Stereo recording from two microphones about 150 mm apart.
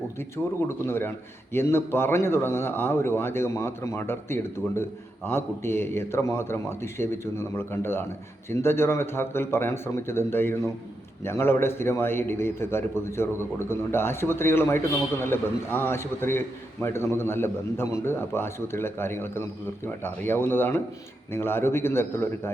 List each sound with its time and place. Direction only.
0.7 s a man's voice: 15° left (ahead or behind)